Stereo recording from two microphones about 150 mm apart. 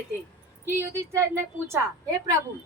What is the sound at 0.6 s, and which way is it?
A woman's voice, 20° right (ahead or behind).